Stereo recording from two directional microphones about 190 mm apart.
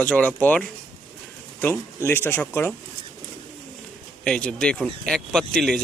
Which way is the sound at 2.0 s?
10° left (ahead or behind).